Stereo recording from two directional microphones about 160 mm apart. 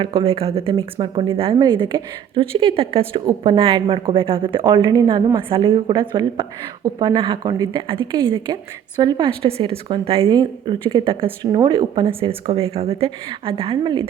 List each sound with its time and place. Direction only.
0.0 s a woman's voice: 35° right (ahead or behind)